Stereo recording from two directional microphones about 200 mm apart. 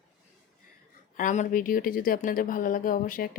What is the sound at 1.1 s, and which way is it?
Speech, 40° left (ahead or behind).